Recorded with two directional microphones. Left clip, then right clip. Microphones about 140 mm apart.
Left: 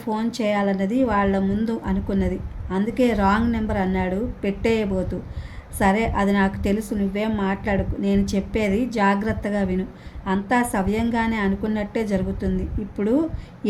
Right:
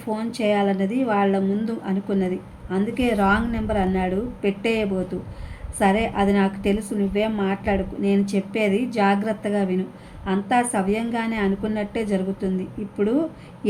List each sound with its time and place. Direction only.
0.0 s a woman's voice: 45° left (ahead or behind)